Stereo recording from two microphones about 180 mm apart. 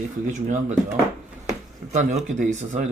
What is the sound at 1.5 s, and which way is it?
Speech, 40° right (ahead or behind).